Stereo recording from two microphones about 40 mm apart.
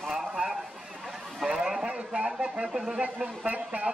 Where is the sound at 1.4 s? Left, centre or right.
Right.